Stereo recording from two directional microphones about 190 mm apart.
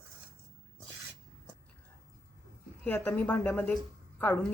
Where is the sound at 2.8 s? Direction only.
10° left (ahead or behind).